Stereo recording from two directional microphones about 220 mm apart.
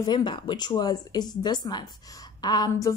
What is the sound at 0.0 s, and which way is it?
A woman's voice, 20° left (ahead or behind).